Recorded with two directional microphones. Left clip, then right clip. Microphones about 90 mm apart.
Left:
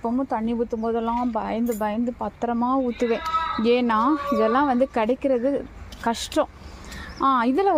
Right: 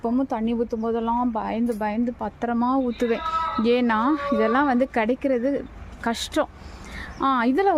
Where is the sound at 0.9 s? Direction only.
5° right (ahead or behind).